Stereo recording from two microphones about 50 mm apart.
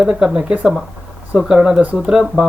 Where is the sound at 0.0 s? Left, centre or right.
Centre.